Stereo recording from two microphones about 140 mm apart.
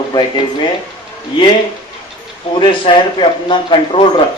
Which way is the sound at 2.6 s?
35° left (ahead or behind).